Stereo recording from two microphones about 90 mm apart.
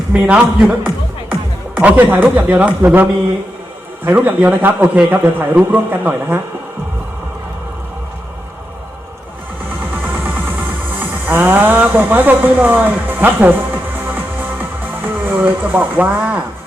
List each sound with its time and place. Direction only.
0.1 s a man's voice: 15° right (ahead or behind)
11.0 s speech: 20° right (ahead or behind)
14.1 s music: 20° right (ahead or behind)